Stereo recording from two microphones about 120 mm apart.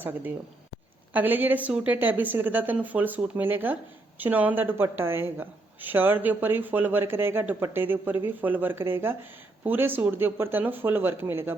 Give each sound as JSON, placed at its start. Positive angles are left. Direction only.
{"t": 0.0, "sound": "a woman's voice", "side_deg": -15}